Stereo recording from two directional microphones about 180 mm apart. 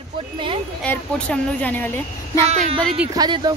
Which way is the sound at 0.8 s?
10° left (ahead or behind).